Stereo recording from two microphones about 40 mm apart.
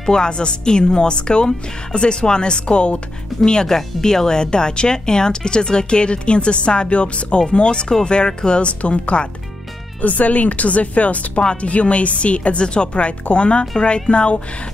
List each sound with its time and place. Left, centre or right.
0.0 s speech: centre
3.6 s speech: centre; by 9.3 s left
10.0 s speech: left